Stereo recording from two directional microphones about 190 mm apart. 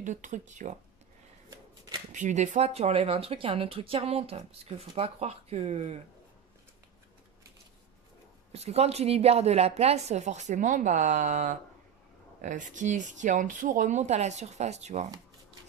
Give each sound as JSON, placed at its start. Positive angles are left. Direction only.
{"t": 0.0, "sound": "speech", "side_deg": -40}
{"t": 2.1, "sound": "speech", "side_deg": -40}
{"t": 8.5, "sound": "speech", "side_deg": -35}